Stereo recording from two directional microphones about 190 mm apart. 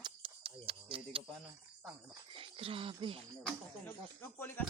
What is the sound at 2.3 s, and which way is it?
Speech, 30° right (ahead or behind).